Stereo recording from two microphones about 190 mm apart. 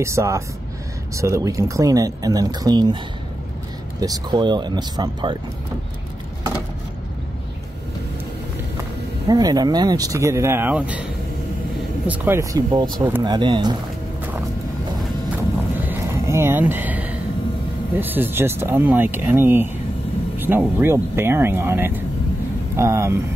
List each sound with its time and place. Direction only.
0.0 s speech: 15° right (ahead or behind)
4.0 s speech: 20° right (ahead or behind)
9.3 s speech: 20° right (ahead or behind)
12.1 s speech: 15° right (ahead or behind)
15.8 s a sound: 10° right (ahead or behind)
17.9 s speech: 10° right (ahead or behind)